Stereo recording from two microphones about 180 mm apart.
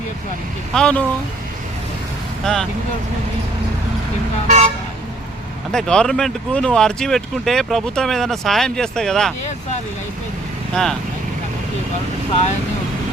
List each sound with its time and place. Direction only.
0.7 s speech: 5° left (ahead or behind)
2.4 s speech: centre (ahead or behind)
4.4 s vehicle: 40° right (ahead or behind)
5.7 s speech: 5° left (ahead or behind)
10.8 s speech: 5° left (ahead or behind)